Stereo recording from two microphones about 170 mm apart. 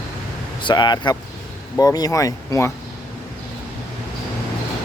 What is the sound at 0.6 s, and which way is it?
Speech, 25° left (ahead or behind).